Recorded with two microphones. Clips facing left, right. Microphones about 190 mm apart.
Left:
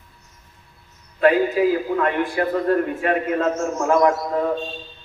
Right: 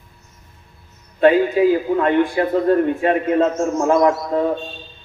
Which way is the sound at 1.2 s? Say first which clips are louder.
Right 3 dB; 25° right (ahead or behind).